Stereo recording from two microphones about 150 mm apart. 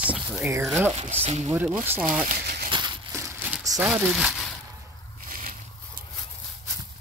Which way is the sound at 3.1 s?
20° right (ahead or behind).